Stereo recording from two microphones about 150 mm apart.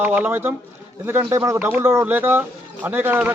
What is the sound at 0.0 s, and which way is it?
A man's voice, 15° right (ahead or behind).